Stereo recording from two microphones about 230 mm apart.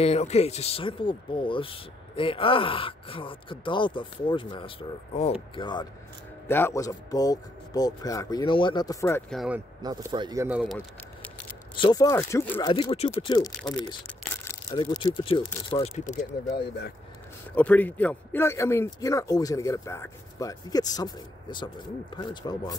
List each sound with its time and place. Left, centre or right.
0.0 s speech: left
6.4 s a man's voice: centre
9.8 s speech: centre
11.2 s a sound: centre
11.7 s a man's voice: centre
12.7 s a man's voice: left
17.6 s a man's voice: centre